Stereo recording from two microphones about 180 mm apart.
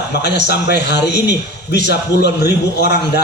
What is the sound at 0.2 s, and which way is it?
A man's voice, 70° left (ahead or behind).